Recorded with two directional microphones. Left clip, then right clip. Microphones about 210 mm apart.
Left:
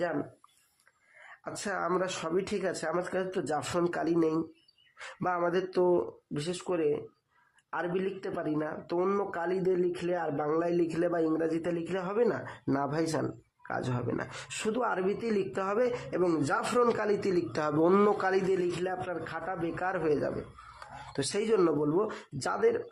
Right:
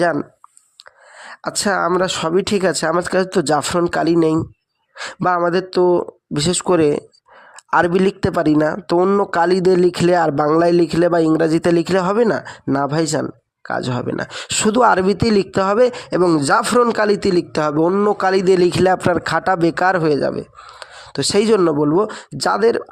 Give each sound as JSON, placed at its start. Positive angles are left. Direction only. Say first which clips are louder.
{"t": 1.3, "sound": "speech", "louder": "right 17 dB", "side_deg": -50}
{"t": 9.0, "sound": "speech", "louder": "right 14 dB", "side_deg": -35}
{"t": 9.4, "sound": "speech", "louder": "right 17 dB", "side_deg": -45}
{"t": 16.8, "sound": "speech", "louder": "right 12 dB", "side_deg": -35}
{"t": 17.8, "sound": "a man's voice", "louder": "right 5 dB", "side_deg": -15}
{"t": 18.1, "sound": "speech", "louder": "right 13 dB", "side_deg": -35}
{"t": 20.7, "sound": "a sound", "louder": "right 11 dB", "side_deg": -35}
{"t": 21.6, "sound": "speech", "louder": "right 12 dB", "side_deg": -40}